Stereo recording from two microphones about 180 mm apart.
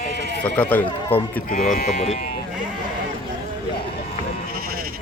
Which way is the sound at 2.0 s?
40° left (ahead or behind).